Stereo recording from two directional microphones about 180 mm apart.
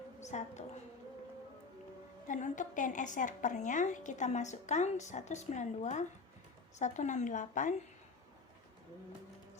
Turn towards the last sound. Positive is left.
turn(degrees=45)  # may be behind; listen again after turning